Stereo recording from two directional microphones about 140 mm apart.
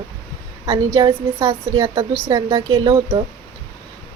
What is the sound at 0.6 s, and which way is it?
Speech, 25° right (ahead or behind).